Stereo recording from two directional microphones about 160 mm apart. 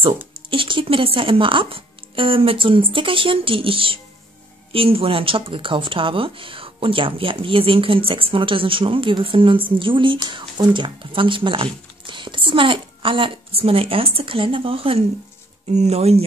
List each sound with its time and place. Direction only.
0.5 s speech: 35° right (ahead or behind)